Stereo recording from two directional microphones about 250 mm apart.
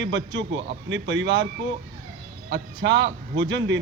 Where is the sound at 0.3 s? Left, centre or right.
Right.